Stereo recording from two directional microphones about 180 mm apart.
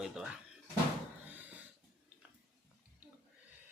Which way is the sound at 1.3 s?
10° right (ahead or behind).